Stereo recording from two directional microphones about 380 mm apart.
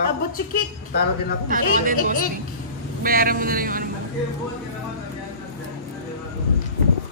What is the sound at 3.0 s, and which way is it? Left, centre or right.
Speech, right.